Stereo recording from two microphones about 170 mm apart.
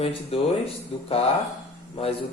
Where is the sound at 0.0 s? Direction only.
35° left (ahead or behind).